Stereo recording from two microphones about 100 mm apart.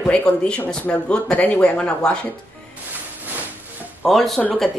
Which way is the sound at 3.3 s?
20° right (ahead or behind).